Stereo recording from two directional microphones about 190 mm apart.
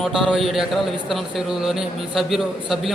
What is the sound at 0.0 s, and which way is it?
A man's voice, centre (ahead or behind).